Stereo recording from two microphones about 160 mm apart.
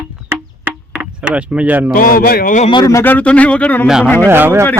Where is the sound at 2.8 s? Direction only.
15° left (ahead or behind).